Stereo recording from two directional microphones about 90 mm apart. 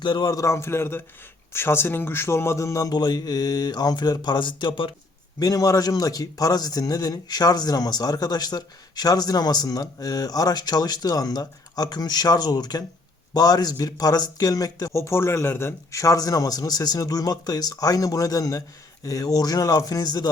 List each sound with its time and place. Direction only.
0.0 s a man's voice: 60° left (ahead or behind)
0.3 s speech: 35° left (ahead or behind)
2.9 s speech: 50° left (ahead or behind); by 4.9 s 65° left (ahead or behind)
5.4 s speech: 40° left (ahead or behind)